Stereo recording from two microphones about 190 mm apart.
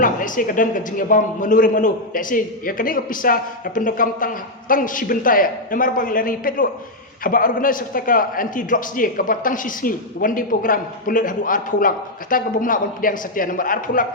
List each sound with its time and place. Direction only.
0.0 s a man's voice: 45° left (ahead or behind)